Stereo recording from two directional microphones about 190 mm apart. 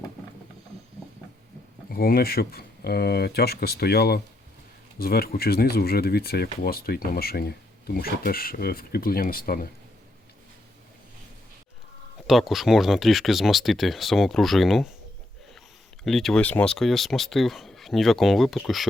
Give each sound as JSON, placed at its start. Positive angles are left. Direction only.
{"t": 1.9, "sound": "speech", "side_deg": 50}
{"t": 12.3, "sound": "speech", "side_deg": 0}
{"t": 16.0, "sound": "speech", "side_deg": 0}